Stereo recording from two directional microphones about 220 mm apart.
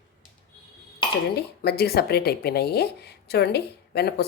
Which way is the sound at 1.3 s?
45° left (ahead or behind).